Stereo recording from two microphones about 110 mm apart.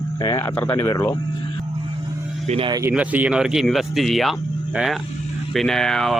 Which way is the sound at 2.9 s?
15° right (ahead or behind).